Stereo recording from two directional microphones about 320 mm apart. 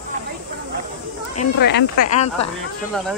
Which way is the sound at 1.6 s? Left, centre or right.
Left.